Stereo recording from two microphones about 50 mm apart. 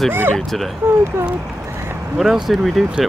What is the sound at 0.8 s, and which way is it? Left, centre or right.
Speech, right.